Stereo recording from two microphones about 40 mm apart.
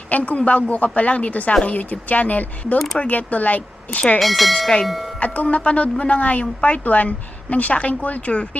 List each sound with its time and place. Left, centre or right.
0.1 s speech: left
2.7 s speech: centre
3.0 s speech: left
4.2 s speech: centre
5.2 s speech: left